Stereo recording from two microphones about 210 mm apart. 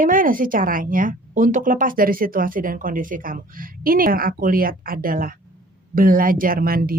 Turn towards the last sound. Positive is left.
turn(degrees=-45)  # may be behind; listen again after turning